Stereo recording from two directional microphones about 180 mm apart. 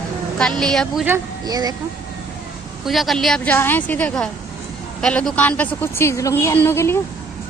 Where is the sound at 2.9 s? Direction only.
Centre (ahead or behind).